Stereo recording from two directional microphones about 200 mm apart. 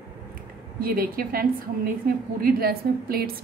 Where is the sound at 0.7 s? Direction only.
45° right (ahead or behind).